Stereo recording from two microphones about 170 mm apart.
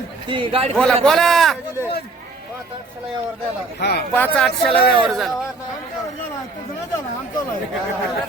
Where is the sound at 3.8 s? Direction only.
70° left (ahead or behind).